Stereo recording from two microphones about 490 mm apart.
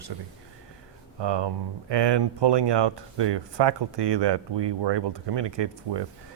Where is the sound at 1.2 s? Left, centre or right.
Right.